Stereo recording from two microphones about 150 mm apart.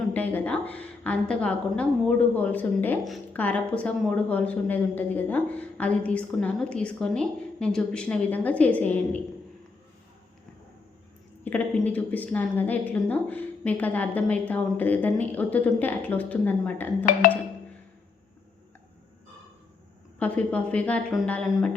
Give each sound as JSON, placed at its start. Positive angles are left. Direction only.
{"t": 0.1, "sound": "a woman's voice", "side_deg": 10}
{"t": 11.4, "sound": "a woman's voice", "side_deg": 10}
{"t": 20.1, "sound": "a woman's voice", "side_deg": 10}